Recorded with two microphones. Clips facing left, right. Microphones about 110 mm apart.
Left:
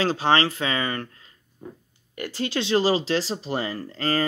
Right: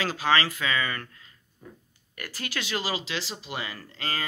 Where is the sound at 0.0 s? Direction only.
30° left (ahead or behind).